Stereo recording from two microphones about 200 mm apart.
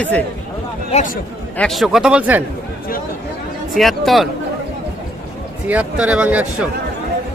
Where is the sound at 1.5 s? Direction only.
Centre (ahead or behind).